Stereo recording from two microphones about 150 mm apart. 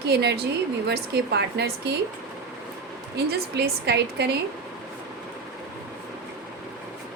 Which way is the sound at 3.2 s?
90° right.